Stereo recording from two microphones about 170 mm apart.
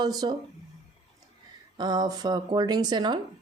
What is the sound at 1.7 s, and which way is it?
Speech, 25° right (ahead or behind).